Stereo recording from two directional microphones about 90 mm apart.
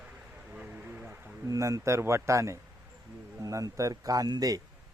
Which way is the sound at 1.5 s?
40° right (ahead or behind).